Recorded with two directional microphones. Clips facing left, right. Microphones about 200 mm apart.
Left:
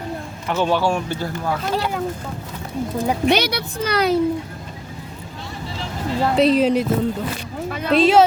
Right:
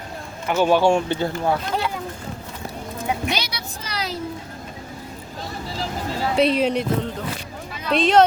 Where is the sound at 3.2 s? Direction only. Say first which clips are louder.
Left 9 dB; 60° left (ahead or behind).